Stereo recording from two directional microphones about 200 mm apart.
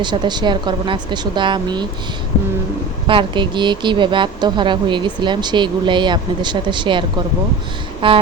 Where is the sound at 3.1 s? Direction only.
25° right (ahead or behind).